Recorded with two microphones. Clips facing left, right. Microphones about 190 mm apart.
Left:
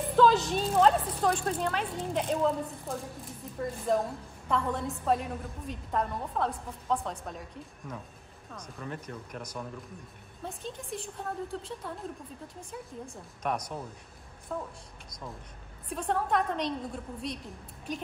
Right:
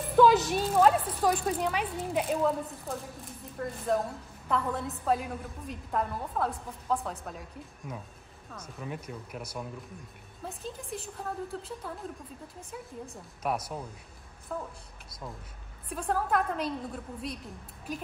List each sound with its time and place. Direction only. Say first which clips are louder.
0.1 s a woman's voice: right 2 dB; 10° right (ahead or behind)
15.9 s a woman's voice: even; 5° right (ahead or behind)